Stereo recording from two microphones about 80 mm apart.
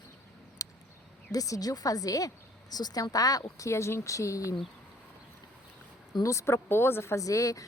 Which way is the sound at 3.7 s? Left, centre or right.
Left.